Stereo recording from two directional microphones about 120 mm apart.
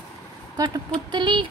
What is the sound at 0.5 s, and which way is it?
Speech, 35° right (ahead or behind).